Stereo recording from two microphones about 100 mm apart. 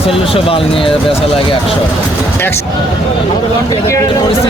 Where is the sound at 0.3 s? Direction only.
70° left (ahead or behind).